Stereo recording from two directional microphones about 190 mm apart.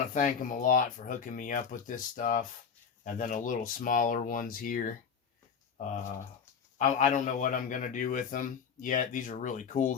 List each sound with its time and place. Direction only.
0.1 s a man's voice: 45° left (ahead or behind)
6.7 s a man's voice: 45° left (ahead or behind)